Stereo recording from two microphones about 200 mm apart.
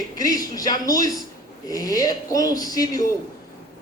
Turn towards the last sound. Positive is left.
turn(degrees=15)  # may be behind; listen again after turning